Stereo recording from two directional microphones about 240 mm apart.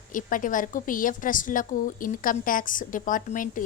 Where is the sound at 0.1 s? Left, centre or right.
Left.